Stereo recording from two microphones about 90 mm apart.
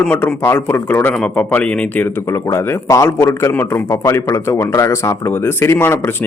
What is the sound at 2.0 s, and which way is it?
Speech, 30° left (ahead or behind).